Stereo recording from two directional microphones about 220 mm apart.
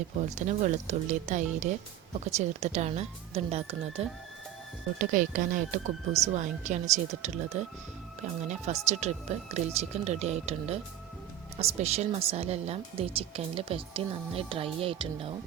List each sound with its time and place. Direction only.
0.3 s speech: 35° right (ahead or behind)